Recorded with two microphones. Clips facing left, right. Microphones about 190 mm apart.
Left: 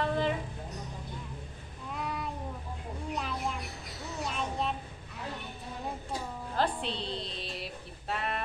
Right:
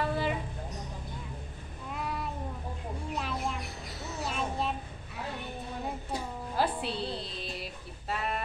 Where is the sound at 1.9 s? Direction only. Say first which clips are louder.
Even; centre (ahead or behind).